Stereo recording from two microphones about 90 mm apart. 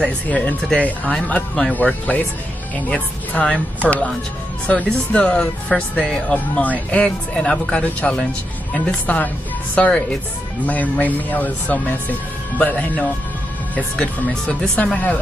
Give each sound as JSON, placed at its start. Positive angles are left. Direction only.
{"t": 0.0, "sound": "speech", "side_deg": 15}
{"t": 14.5, "sound": "speech", "side_deg": 10}